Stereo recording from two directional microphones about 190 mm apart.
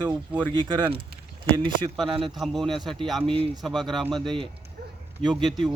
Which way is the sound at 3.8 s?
Centre (ahead or behind).